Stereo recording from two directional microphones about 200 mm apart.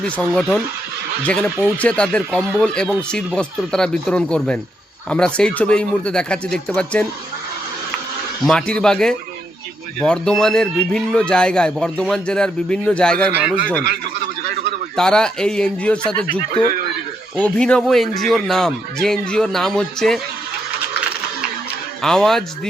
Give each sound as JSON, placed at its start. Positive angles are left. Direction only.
{"t": 0.0, "sound": "a man's voice", "side_deg": 5}
{"t": 1.8, "sound": "a man's voice", "side_deg": 5}
{"t": 8.4, "sound": "a man's voice", "side_deg": 5}
{"t": 13.3, "sound": "speech", "side_deg": -5}
{"t": 14.4, "sound": "a sound", "side_deg": -55}
{"t": 14.9, "sound": "a man's voice", "side_deg": 5}
{"t": 17.3, "sound": "a man's voice", "side_deg": 5}
{"t": 22.0, "sound": "a man's voice", "side_deg": 0}